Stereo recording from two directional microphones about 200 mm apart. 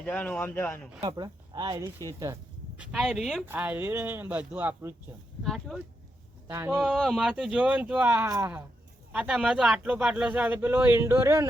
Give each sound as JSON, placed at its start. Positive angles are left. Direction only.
{"t": 0.0, "sound": "speech", "side_deg": 5}
{"t": 1.0, "sound": "speech", "side_deg": -20}
{"t": 2.7, "sound": "speech", "side_deg": -5}
{"t": 5.4, "sound": "speech", "side_deg": 0}
{"t": 6.5, "sound": "speech", "side_deg": -15}
{"t": 6.8, "sound": "speech", "side_deg": 0}
{"t": 9.1, "sound": "speech", "side_deg": -5}